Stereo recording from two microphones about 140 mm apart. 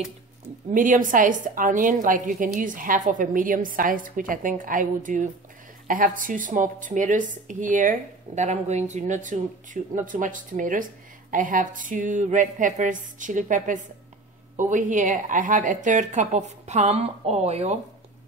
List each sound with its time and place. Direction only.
0.7 s a woman's voice: 70° right (ahead or behind); by 17.7 s 50° right (ahead or behind)